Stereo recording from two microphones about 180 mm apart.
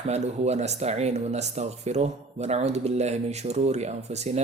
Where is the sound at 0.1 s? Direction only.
35° right (ahead or behind).